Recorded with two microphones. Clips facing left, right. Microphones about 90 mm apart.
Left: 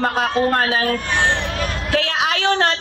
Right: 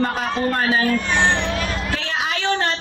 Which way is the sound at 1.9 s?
90° left.